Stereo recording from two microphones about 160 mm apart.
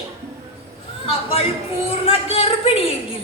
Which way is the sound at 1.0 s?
35° left (ahead or behind).